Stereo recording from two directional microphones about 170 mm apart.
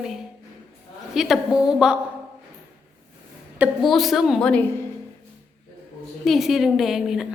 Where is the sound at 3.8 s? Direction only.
Centre (ahead or behind).